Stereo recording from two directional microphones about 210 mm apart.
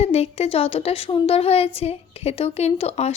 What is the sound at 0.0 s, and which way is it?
A woman's voice, 30° left (ahead or behind).